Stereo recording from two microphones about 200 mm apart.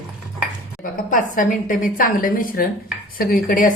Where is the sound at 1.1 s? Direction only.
40° left (ahead or behind).